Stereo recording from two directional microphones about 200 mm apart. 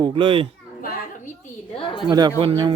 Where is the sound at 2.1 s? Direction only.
20° right (ahead or behind).